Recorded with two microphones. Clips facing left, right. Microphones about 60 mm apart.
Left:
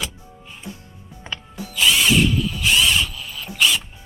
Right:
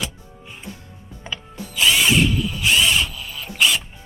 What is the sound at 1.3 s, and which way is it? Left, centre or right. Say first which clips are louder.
Drill: even; centre.